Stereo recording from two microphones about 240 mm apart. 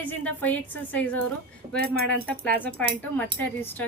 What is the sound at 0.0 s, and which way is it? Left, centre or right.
A woman's voice, centre.